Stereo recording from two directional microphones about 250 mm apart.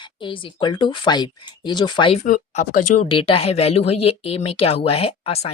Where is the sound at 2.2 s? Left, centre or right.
Left.